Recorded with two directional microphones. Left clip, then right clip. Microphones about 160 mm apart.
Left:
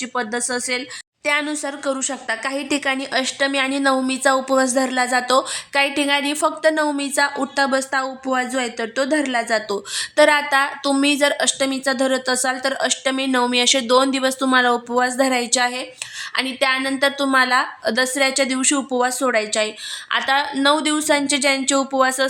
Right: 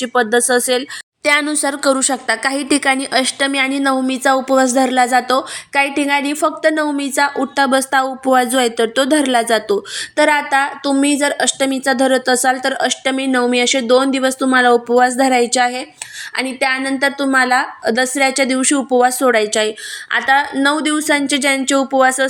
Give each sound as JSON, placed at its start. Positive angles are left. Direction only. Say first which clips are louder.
{"t": 0.0, "sound": "a woman's voice", "louder": "right 9 dB", "side_deg": -20}